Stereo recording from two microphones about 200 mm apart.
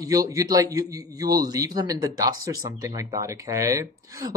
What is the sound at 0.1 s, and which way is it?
A man's voice, 15° right (ahead or behind).